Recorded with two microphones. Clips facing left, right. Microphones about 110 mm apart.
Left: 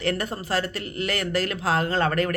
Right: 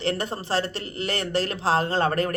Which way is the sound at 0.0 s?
30° right (ahead or behind).